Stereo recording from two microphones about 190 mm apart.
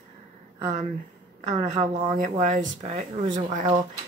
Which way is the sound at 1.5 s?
20° right (ahead or behind).